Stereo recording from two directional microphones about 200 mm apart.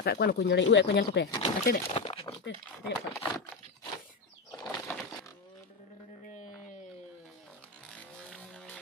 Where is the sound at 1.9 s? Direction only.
25° left (ahead or behind).